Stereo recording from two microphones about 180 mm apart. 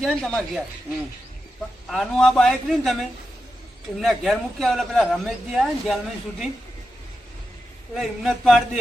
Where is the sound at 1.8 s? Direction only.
Centre (ahead or behind).